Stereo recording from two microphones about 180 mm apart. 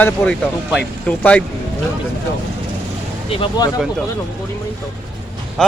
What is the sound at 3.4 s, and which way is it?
Speech, 20° left (ahead or behind).